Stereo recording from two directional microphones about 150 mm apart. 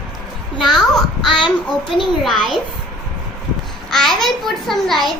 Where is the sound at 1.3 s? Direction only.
30° left (ahead or behind).